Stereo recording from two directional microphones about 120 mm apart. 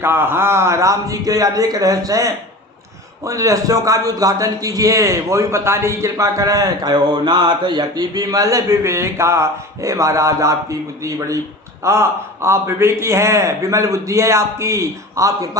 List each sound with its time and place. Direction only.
0.0 s a man's voice: 20° right (ahead or behind)